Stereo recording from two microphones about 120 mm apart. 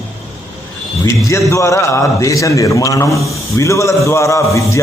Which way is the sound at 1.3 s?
25° left (ahead or behind).